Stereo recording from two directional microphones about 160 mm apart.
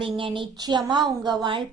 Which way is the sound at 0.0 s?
30° right (ahead or behind).